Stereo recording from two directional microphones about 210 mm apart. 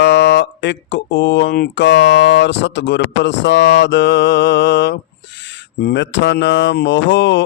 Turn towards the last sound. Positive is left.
turn(degrees=55)  # may be behind; listen again after turning